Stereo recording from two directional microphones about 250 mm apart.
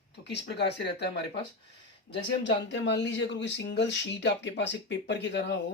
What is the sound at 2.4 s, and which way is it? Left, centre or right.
Speech, left.